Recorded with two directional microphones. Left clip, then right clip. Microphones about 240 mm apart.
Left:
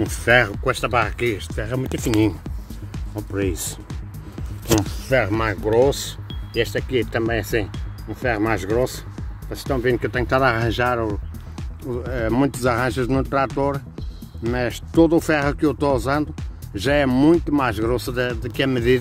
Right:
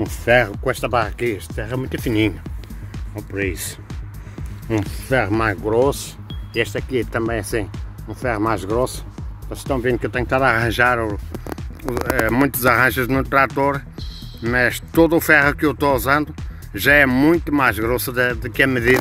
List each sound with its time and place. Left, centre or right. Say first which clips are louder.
0.0 s speech: right 1 dB; centre
3.3 s speech: right 1 dB; centre
5.0 s speech: right 5 dB; centre